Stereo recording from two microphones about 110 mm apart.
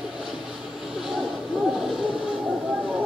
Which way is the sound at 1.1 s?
Centre (ahead or behind).